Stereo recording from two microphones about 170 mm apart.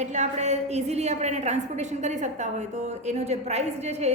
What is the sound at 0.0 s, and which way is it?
A woman's voice, 45° right (ahead or behind).